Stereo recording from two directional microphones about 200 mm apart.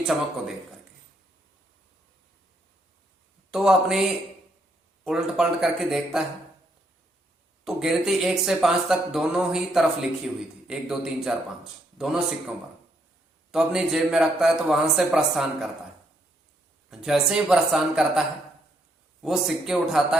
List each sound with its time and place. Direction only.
3.5 s speech: centre (ahead or behind)
5.0 s speech: 5° right (ahead or behind)
7.6 s speech: centre (ahead or behind)
16.9 s speech: centre (ahead or behind)